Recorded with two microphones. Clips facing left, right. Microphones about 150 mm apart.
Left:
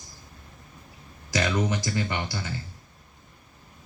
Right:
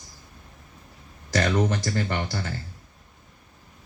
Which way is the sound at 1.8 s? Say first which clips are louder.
Right 2 dB; 50° right (ahead or behind).